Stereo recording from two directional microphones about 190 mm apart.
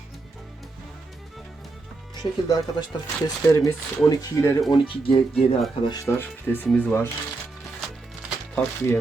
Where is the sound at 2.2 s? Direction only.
20° left (ahead or behind).